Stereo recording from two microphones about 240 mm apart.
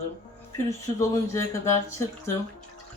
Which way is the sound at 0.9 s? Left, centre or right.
Centre.